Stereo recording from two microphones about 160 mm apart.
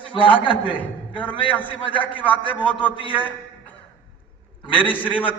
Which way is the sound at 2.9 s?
30° left (ahead or behind).